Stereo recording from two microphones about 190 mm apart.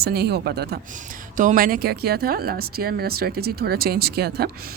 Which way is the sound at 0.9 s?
45° right (ahead or behind).